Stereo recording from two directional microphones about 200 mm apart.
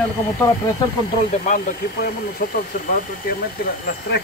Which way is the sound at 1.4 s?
40° left (ahead or behind).